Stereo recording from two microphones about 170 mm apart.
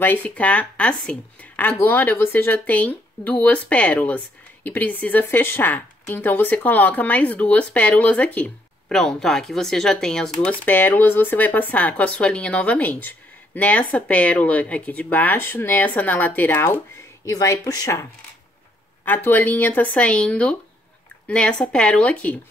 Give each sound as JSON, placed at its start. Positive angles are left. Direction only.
{"t": 0.0, "sound": "a woman's voice", "side_deg": 10}
{"t": 19.0, "sound": "a woman's voice", "side_deg": 10}